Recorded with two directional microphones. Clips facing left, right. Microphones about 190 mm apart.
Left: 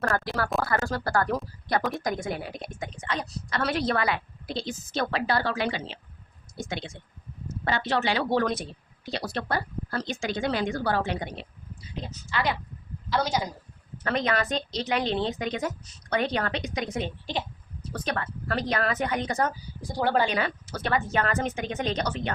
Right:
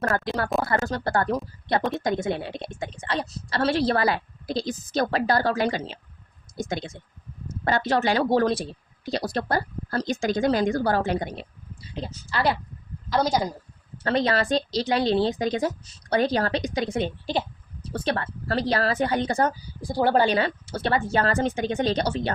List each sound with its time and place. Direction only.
0.1 s a woman's voice: 25° right (ahead or behind)
14.0 s a woman's voice: 30° right (ahead or behind)